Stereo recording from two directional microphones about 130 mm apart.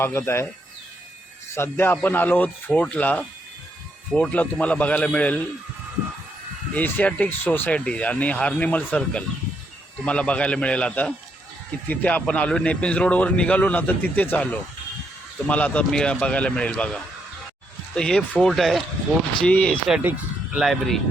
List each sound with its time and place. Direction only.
0.0 s speech: 20° left (ahead or behind)
1.5 s a man's voice: 20° left (ahead or behind)
6.7 s a man's voice: 15° left (ahead or behind)
20.0 s speech: 15° right (ahead or behind)
20.7 s speech: centre (ahead or behind)